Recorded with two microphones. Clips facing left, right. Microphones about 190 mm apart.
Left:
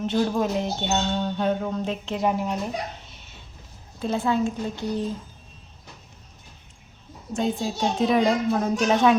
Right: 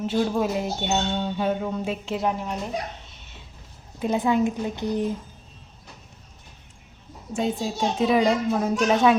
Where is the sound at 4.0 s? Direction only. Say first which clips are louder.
Right 2 dB; 15° right (ahead or behind).